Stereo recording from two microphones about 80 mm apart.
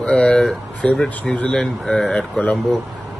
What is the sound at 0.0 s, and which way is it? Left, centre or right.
Speech, centre.